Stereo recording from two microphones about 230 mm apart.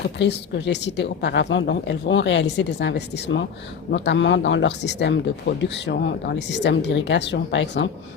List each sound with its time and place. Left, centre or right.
0.2 s speech: left